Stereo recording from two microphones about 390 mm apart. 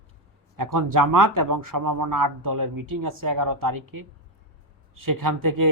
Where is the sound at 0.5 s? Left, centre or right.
Right.